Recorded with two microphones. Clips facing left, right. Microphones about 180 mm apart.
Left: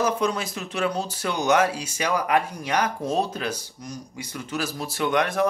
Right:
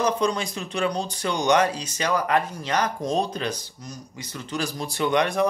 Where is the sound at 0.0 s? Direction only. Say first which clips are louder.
Right 1 dB; 5° left (ahead or behind).